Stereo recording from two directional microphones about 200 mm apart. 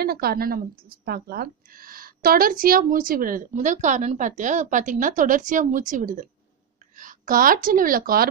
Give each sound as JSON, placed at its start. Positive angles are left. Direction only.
{"t": 0.0, "sound": "speech", "side_deg": -50}